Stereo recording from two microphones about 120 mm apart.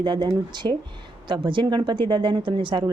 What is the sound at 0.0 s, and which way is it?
Speech, 40° right (ahead or behind).